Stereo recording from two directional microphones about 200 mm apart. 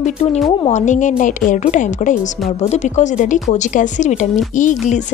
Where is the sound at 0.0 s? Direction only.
35° left (ahead or behind).